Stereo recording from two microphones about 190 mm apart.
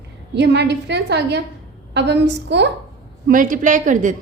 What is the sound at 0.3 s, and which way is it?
A woman's voice, 65° right (ahead or behind).